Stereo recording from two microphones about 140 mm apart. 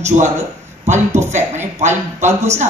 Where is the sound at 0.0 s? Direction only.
60° right (ahead or behind).